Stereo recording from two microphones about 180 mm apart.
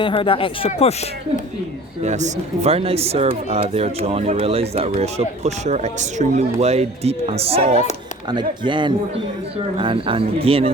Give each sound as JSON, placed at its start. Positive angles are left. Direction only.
{"t": 0.0, "sound": "speech", "side_deg": 30}
{"t": 2.0, "sound": "speech", "side_deg": -40}